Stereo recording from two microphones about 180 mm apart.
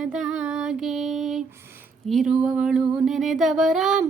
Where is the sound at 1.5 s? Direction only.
15° right (ahead or behind).